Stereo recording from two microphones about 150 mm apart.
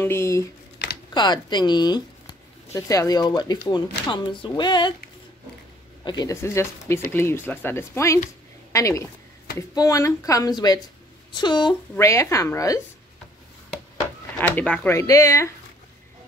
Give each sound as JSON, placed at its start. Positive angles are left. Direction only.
{"t": 0.0, "sound": "speech", "side_deg": 15}
{"t": 6.0, "sound": "speech", "side_deg": 25}
{"t": 12.0, "sound": "speech", "side_deg": 20}
{"t": 14.4, "sound": "speech", "side_deg": 10}